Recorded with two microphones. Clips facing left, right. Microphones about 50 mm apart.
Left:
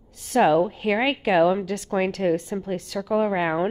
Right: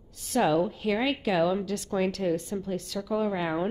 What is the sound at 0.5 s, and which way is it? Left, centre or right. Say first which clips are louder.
A woman's voice: left 5 dB; left.